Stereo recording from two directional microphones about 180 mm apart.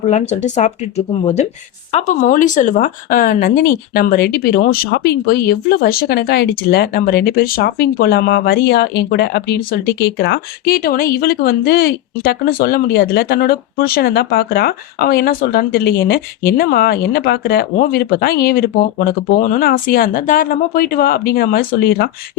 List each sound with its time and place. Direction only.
0.1 s speech: 40° left (ahead or behind); by 22.1 s 60° left (ahead or behind)